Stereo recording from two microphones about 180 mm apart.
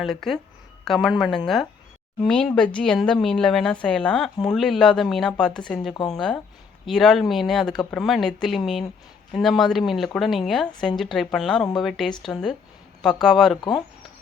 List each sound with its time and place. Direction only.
0.0 s speech: centre (ahead or behind)
2.2 s speech: 5° left (ahead or behind)
5.9 s speech: 30° left (ahead or behind)
6.1 s speech: 5° left (ahead or behind)